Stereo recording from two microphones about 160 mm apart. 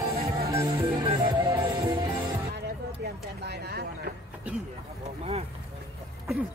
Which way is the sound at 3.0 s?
75° right (ahead or behind).